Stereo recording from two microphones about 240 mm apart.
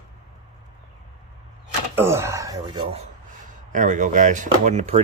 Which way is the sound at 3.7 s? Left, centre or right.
Right.